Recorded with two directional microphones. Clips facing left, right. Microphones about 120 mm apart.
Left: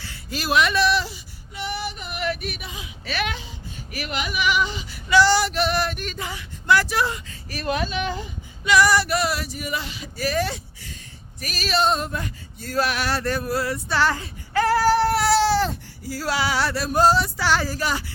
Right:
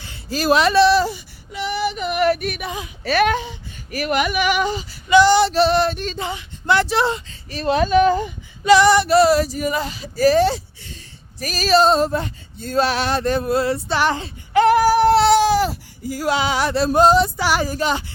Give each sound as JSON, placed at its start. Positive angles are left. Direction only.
{"t": 0.3, "sound": "speech", "side_deg": -35}
{"t": 1.5, "sound": "female singing", "side_deg": -90}
{"t": 2.2, "sound": "speech", "side_deg": -50}
{"t": 5.0, "sound": "male singing", "side_deg": -20}
{"t": 5.5, "sound": "a sound", "side_deg": -30}
{"t": 7.9, "sound": "speech", "side_deg": -45}
{"t": 8.7, "sound": "speech", "side_deg": -25}
{"t": 11.3, "sound": "a sound", "side_deg": -40}
{"t": 15.1, "sound": "baby cry", "side_deg": -25}
{"t": 15.4, "sound": "a sound", "side_deg": -15}